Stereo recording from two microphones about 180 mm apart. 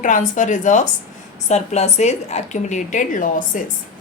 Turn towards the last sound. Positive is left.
turn(degrees=45)  # may be behind; listen again after turning